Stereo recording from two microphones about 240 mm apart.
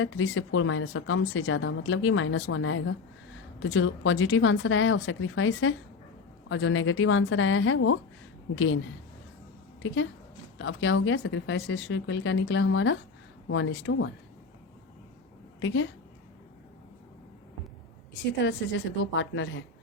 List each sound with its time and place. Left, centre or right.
0.0 s speech: left
9.8 s speech: left
15.6 s speech: left
18.1 s speech: left